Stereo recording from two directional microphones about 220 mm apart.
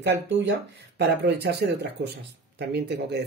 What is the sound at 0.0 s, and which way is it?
Speech, 50° right (ahead or behind).